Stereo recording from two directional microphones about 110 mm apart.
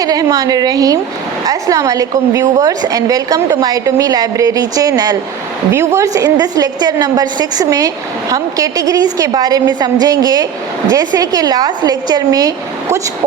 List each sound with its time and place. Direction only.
0.0 s a woman's voice: 35° right (ahead or behind)
5.7 s a woman's voice: 25° right (ahead or behind)